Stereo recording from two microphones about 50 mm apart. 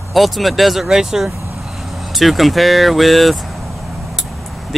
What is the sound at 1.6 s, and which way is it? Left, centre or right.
Speech, centre.